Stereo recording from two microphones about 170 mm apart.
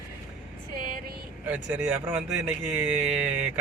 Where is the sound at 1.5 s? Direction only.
10° right (ahead or behind).